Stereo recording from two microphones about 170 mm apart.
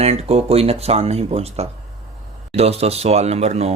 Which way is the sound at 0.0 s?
40° right (ahead or behind).